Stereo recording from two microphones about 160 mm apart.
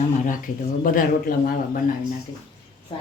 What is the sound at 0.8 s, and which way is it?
Speech, 60° left (ahead or behind).